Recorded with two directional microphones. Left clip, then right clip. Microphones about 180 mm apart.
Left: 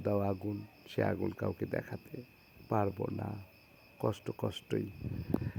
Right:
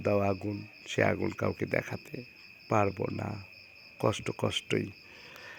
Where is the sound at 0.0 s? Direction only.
10° right (ahead or behind).